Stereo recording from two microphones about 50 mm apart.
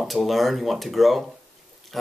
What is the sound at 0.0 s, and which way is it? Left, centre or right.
Speech, centre.